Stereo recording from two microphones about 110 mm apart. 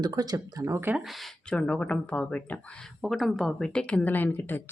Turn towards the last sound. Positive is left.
turn(degrees=15)  # may be behind; listen again after turning